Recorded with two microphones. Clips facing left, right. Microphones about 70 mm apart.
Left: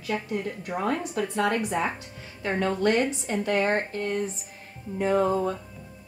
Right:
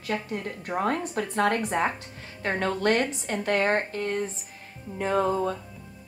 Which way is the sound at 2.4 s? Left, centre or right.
Right.